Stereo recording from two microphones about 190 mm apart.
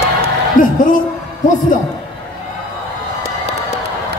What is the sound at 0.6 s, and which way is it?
Music, 45° left (ahead or behind).